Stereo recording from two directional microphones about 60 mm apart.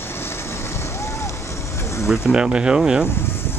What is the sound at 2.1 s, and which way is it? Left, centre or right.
Speech, centre.